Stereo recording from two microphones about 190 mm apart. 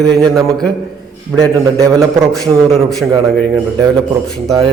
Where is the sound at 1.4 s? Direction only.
20° right (ahead or behind).